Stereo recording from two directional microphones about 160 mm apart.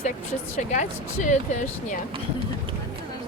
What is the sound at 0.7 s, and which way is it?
Speech, 50° left (ahead or behind).